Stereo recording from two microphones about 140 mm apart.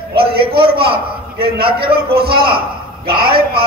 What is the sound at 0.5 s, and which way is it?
A man's voice, 90° right.